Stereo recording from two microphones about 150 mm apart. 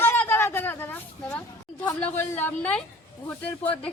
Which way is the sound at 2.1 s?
15° left (ahead or behind).